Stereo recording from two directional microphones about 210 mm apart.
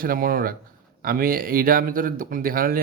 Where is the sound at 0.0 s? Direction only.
45° right (ahead or behind).